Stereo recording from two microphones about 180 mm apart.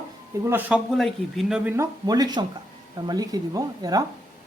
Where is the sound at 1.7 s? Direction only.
20° right (ahead or behind).